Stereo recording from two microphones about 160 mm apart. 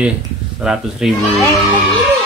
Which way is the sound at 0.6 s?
5° right (ahead or behind).